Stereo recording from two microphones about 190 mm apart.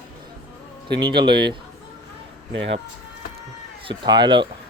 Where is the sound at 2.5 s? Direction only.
75° right (ahead or behind).